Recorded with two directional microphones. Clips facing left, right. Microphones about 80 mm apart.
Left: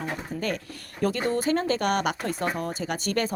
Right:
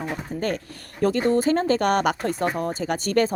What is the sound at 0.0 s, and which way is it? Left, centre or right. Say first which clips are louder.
Speech: right 3 dB; right.